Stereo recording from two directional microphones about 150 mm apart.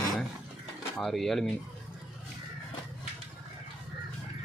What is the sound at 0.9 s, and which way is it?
Speech, centre (ahead or behind).